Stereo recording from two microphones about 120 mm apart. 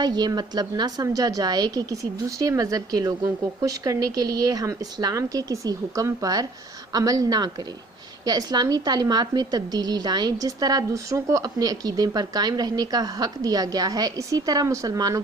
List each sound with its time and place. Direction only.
0.0 s a woman's voice: 35° right (ahead or behind)